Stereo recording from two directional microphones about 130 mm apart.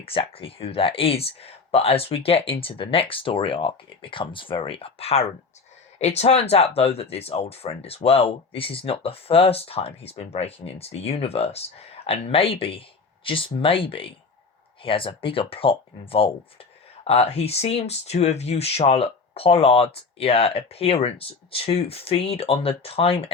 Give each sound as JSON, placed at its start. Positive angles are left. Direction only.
{"t": 0.0, "sound": "speech", "side_deg": 45}